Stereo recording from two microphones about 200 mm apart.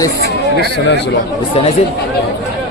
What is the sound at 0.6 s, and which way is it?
Speech, 60° left (ahead or behind).